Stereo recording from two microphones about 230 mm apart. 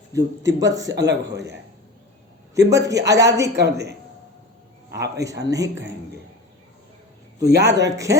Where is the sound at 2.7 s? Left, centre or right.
Centre.